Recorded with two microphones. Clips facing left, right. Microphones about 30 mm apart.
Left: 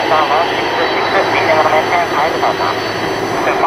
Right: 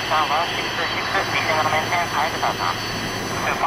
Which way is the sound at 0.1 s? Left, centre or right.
Left.